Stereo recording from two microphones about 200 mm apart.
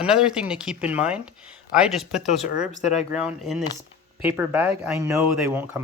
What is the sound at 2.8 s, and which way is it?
Speech, 35° left (ahead or behind).